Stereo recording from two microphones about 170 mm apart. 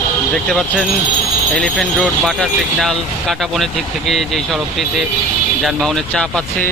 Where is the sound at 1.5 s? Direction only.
Centre (ahead or behind).